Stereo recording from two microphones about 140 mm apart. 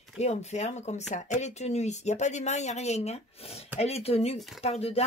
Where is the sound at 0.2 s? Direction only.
50° left (ahead or behind).